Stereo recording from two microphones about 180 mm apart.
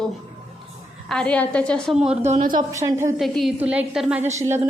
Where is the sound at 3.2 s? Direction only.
Centre (ahead or behind).